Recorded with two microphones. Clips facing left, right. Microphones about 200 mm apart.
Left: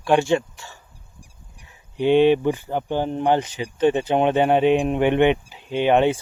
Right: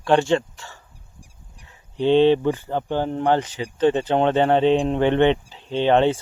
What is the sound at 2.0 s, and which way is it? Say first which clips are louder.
Speech: even; 15° left (ahead or behind).